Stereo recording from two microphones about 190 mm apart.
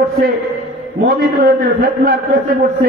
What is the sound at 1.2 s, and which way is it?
A man's voice, 50° right (ahead or behind).